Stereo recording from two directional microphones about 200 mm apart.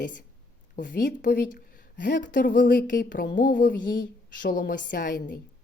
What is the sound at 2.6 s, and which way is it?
A woman's voice, 55° left (ahead or behind).